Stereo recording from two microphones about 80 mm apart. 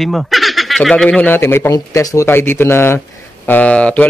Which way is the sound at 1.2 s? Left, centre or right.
Left.